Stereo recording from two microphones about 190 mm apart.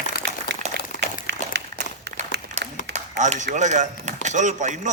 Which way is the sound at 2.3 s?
65° right (ahead or behind).